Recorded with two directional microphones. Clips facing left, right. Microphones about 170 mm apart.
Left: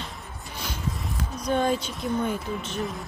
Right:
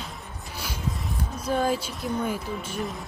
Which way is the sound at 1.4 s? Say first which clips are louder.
Left 1 dB; 5° right (ahead or behind).